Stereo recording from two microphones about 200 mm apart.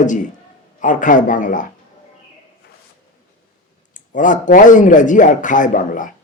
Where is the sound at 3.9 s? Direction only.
40° left (ahead or behind).